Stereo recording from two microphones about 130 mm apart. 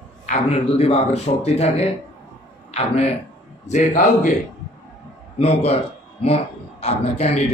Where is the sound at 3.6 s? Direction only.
65° left (ahead or behind); by 4.3 s 85° left.